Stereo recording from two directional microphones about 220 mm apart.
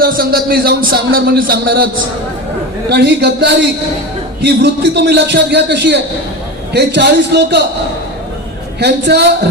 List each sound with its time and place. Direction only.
0.0 s speech: 45° right (ahead or behind)
2.9 s speech: 50° right (ahead or behind)
8.8 s speech: 50° right (ahead or behind)